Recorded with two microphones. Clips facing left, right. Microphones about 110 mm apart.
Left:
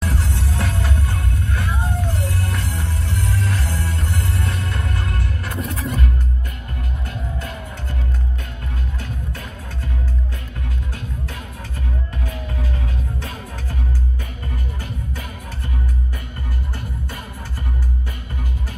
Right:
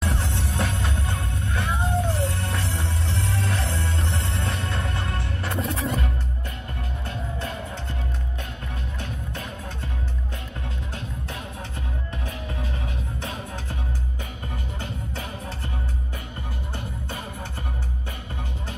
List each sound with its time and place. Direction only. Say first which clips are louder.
0.0 s music: left 2 dB; 25° right (ahead or behind)
7.1 s music: right 1 dB; 25° right (ahead or behind)